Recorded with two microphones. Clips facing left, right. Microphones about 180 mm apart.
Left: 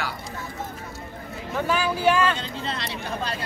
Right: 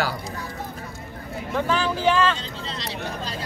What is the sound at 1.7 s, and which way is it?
Speech, 10° left (ahead or behind).